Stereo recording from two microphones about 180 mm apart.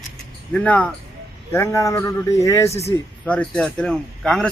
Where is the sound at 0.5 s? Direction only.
5° left (ahead or behind).